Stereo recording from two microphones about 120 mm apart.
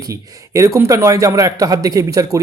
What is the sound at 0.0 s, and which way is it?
A man's voice, 25° right (ahead or behind).